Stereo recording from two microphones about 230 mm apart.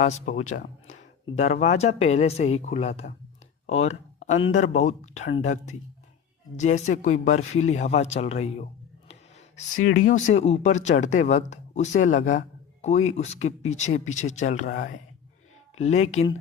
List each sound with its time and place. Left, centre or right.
0.0 s speech: left
3.7 s a sound: left
4.4 s speech: left
9.7 s speech: left
10.1 s speech: left
16.1 s speech: left